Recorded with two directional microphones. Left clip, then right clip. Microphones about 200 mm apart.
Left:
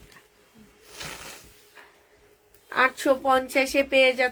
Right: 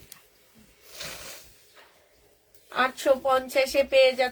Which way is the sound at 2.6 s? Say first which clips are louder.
Left 2 dB; 30° left (ahead or behind).